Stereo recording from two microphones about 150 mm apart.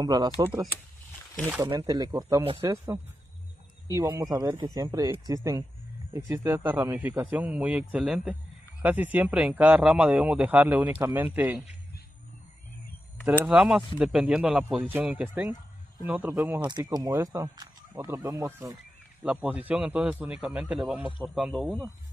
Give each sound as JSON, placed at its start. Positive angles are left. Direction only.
{"t": 0.0, "sound": "speech", "side_deg": -25}
{"t": 13.2, "sound": "speech", "side_deg": -5}
{"t": 16.6, "sound": "speech", "side_deg": -25}